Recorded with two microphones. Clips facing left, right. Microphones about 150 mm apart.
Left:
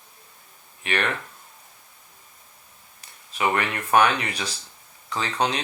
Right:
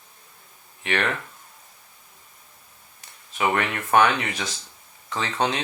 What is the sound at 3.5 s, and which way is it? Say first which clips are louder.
Speech: even; 10° left (ahead or behind).